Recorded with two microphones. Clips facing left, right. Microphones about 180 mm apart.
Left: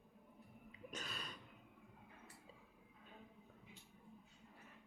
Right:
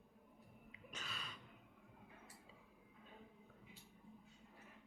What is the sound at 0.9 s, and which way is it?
Gasp, 40° left (ahead or behind).